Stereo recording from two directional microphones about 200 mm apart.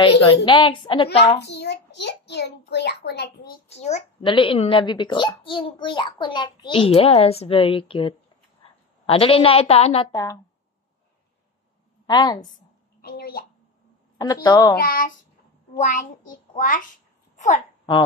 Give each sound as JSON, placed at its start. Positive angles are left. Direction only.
{"t": 0.5, "sound": "a child's voice", "side_deg": 25}
{"t": 1.4, "sound": "a child's voice", "side_deg": 60}
{"t": 3.6, "sound": "a child's voice", "side_deg": 35}
{"t": 10.1, "sound": "a woman's voice", "side_deg": 15}
{"t": 12.1, "sound": "a child's voice", "side_deg": 20}
{"t": 13.0, "sound": "a woman's voice", "side_deg": 50}
{"t": 14.1, "sound": "a woman's voice", "side_deg": 15}
{"t": 14.8, "sound": "a woman's voice", "side_deg": 45}